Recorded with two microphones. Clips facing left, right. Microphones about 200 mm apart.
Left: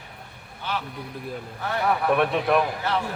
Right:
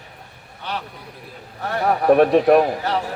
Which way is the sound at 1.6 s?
40° right (ahead or behind).